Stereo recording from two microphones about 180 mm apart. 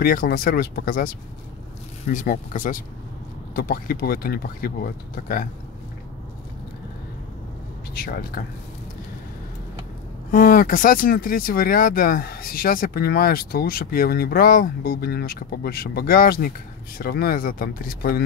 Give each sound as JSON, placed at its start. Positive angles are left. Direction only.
{"t": 0.0, "sound": "speech", "side_deg": 55}
{"t": 2.1, "sound": "speech", "side_deg": 45}
{"t": 7.9, "sound": "speech", "side_deg": 55}
{"t": 10.3, "sound": "speech", "side_deg": 50}